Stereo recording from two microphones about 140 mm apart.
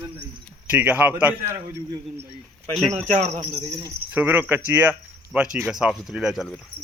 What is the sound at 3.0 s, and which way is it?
Speech, 55° right (ahead or behind).